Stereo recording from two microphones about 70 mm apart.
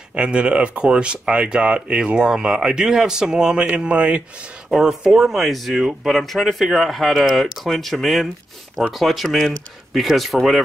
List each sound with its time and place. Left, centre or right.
0.1 s speech: centre